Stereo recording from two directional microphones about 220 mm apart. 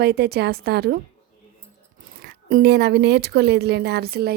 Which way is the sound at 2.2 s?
50° right (ahead or behind).